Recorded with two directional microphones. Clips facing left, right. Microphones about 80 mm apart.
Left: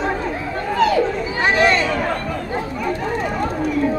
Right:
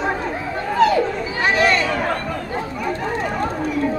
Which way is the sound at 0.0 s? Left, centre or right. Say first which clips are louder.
Left 1 dB; centre.